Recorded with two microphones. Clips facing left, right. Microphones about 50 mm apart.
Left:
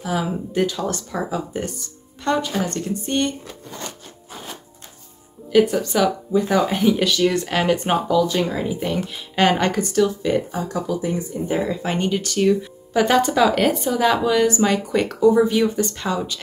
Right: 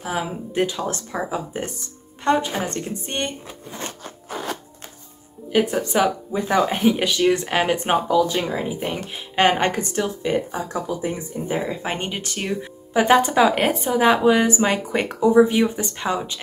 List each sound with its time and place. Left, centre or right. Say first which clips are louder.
0.0 s speech: left 2 dB; right
4.0 s zipper: right 7 dB; right
5.5 s speech: left 4 dB; centre
5.8 s speech: even; right